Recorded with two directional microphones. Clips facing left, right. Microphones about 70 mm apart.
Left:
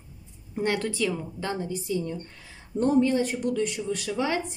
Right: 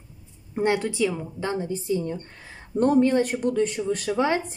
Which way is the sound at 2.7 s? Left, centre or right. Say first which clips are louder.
Right 3 dB; right.